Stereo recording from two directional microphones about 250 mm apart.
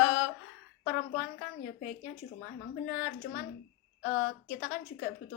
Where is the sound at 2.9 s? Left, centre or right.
Left.